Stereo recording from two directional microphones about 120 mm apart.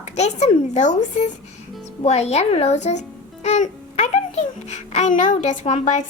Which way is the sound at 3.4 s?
65° left (ahead or behind).